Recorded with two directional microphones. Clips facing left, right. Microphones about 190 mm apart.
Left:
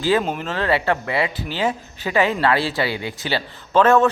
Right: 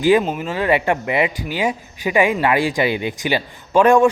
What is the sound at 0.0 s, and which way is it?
Speech, 15° right (ahead or behind).